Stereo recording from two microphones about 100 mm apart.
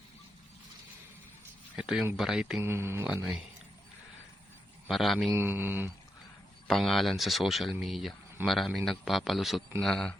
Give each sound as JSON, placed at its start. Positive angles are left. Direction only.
{"t": 1.7, "sound": "speech", "side_deg": -5}
{"t": 2.6, "sound": "speech", "side_deg": -25}
{"t": 4.9, "sound": "speech", "side_deg": 0}
{"t": 5.3, "sound": "speech", "side_deg": -20}
{"t": 6.7, "sound": "speech", "side_deg": 0}